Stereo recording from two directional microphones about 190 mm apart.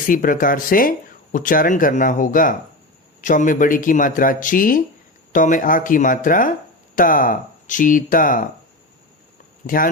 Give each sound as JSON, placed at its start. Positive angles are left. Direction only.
{"t": 0.1, "sound": "speech", "side_deg": 45}
{"t": 9.6, "sound": "speech", "side_deg": 45}